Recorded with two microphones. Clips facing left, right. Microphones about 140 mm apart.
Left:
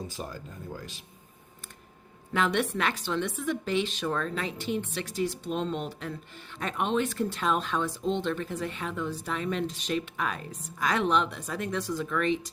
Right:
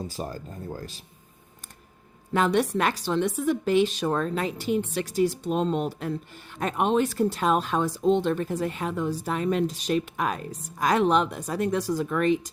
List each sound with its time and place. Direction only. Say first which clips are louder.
0.1 s speech: right 4 dB; 40° right (ahead or behind)
2.3 s a woman's voice: right 4 dB; 40° right (ahead or behind)